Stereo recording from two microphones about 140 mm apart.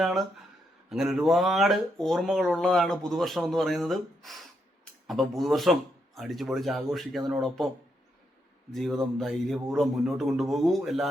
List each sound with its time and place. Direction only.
0.0 s speech: centre (ahead or behind)
8.7 s speech: centre (ahead or behind)